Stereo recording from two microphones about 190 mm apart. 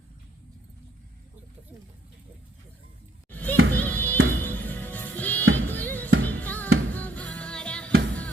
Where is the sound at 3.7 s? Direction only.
10° left (ahead or behind).